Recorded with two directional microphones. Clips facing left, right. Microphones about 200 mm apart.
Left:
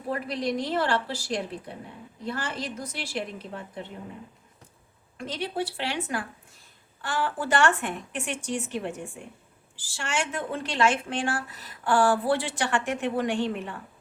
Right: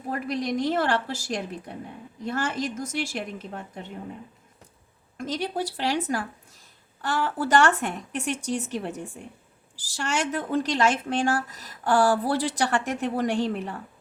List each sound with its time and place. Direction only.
0.1 s a woman's voice: 45° right (ahead or behind)
5.1 s a woman's voice: 40° right (ahead or behind)